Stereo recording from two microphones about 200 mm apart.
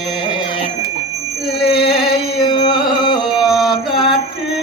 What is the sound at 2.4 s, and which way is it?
Music, 25° left (ahead or behind).